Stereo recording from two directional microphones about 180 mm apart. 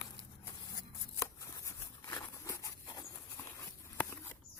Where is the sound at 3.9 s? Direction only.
10° left (ahead or behind).